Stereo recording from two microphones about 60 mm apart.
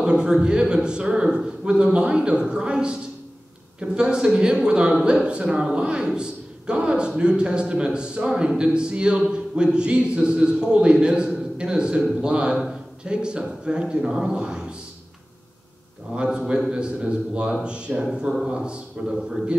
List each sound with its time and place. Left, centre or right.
0.0 s a man's voice: centre
16.2 s a man's voice: centre